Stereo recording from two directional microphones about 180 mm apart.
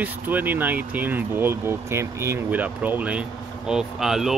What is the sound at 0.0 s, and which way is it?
Speech, 10° right (ahead or behind).